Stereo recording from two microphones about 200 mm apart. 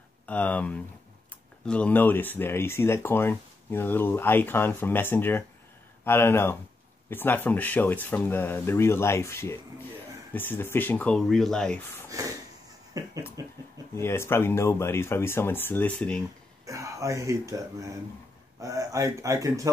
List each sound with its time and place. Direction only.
0.3 s speech: 5° left (ahead or behind)
12.9 s speech: 15° right (ahead or behind)
13.9 s speech: 10° left (ahead or behind)
16.6 s speech: 15° right (ahead or behind)